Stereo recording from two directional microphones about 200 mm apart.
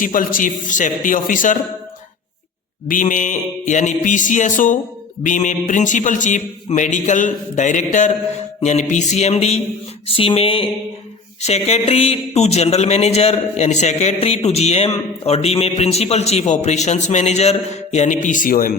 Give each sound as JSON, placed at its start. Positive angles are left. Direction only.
{"t": 0.0, "sound": "a man's voice", "side_deg": 45}
{"t": 2.8, "sound": "a man's voice", "side_deg": 40}
{"t": 10.1, "sound": "a sound", "side_deg": 25}
{"t": 11.4, "sound": "a man's voice", "side_deg": 30}